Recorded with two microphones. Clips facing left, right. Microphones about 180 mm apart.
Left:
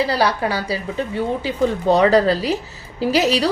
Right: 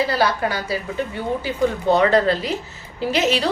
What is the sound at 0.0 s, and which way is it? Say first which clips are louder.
A woman's voice: left 1 dB; 30° left (ahead or behind).